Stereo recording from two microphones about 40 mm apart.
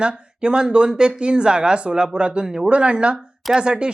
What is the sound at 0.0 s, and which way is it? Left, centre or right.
Speech, right.